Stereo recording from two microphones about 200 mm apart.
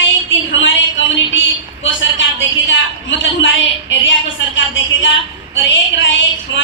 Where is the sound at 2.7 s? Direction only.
65° left (ahead or behind).